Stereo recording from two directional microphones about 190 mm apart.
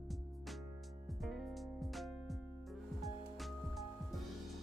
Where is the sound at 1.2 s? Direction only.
Centre (ahead or behind).